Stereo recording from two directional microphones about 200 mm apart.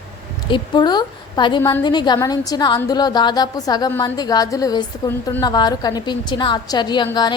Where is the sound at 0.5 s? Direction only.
20° left (ahead or behind).